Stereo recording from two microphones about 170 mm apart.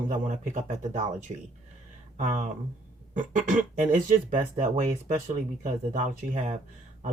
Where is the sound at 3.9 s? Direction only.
45° right (ahead or behind).